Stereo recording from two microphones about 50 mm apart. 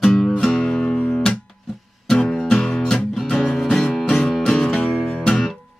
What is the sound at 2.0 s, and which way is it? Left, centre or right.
Music, centre.